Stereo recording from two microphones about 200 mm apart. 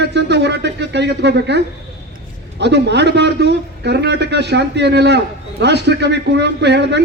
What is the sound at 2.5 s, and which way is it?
A man's voice, 60° right (ahead or behind).